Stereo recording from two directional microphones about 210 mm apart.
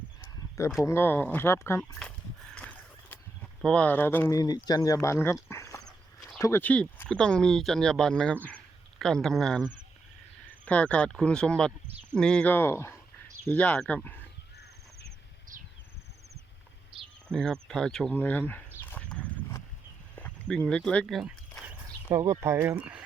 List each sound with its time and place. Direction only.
0.2 s a sound: 15° left (ahead or behind)
0.9 s speech: 10° left (ahead or behind)
2.6 s a sound: 5° left (ahead or behind)
3.6 s speech: 5° left (ahead or behind)
10.7 s speech: 5° left (ahead or behind)
16.9 s a sound: 25° right (ahead or behind)
17.2 s speech: 5° left (ahead or behind)
18.8 s horse: 10° left (ahead or behind)
20.1 s walk: 5° left (ahead or behind)
22.1 s speech: 15° right (ahead or behind)